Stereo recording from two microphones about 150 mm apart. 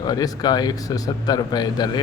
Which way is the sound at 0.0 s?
25° left (ahead or behind).